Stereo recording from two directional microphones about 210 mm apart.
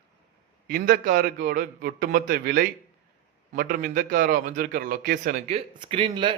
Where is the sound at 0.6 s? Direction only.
40° right (ahead or behind).